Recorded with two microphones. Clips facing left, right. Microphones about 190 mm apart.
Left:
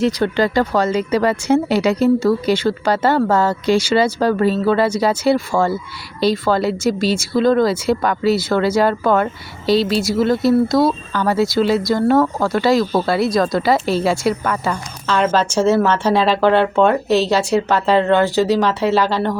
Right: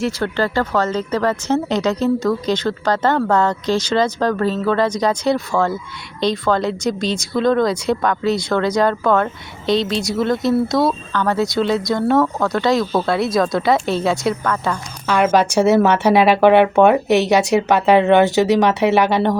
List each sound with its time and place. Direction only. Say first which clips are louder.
0.0 s speech: left 3 dB; 15° left (ahead or behind)
15.0 s speech: right 2 dB; 10° right (ahead or behind)